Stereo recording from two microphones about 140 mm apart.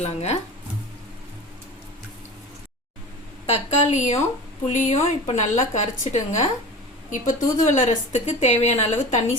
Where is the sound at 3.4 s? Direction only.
55° left (ahead or behind).